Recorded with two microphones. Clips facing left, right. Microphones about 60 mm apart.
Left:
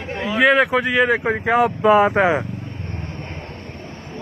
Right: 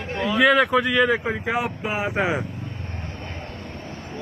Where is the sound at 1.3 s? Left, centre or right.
Left.